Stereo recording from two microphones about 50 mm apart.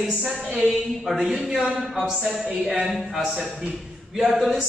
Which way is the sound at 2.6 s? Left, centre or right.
Centre.